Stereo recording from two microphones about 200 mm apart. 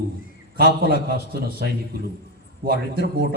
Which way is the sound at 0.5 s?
50° right (ahead or behind).